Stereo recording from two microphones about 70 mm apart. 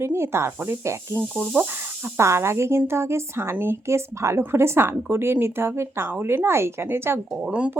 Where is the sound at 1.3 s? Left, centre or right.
Right.